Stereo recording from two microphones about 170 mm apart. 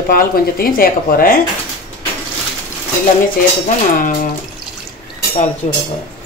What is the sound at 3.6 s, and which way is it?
Speech, 50° left (ahead or behind).